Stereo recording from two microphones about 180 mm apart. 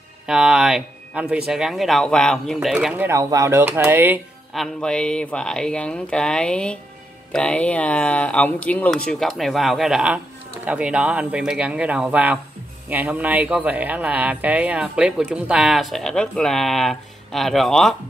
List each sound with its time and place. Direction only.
0.3 s speech: 5° right (ahead or behind)
3.1 s speech: 20° right (ahead or behind)
4.6 s speech: 5° left (ahead or behind)